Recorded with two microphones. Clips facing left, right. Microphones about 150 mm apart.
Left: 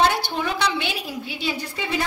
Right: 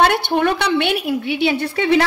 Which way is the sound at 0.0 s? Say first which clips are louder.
Right 6 dB; 60° right (ahead or behind).